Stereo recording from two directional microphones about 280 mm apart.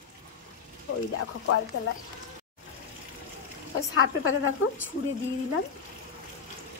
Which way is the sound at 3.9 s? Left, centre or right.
Left.